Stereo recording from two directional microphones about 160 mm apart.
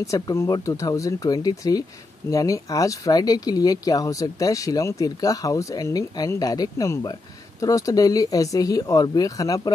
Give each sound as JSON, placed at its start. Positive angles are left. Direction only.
{"t": 0.0, "sound": "speech", "side_deg": 20}